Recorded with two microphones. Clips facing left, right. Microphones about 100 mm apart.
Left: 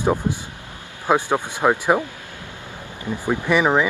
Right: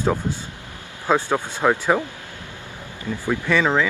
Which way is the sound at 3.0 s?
15° left (ahead or behind).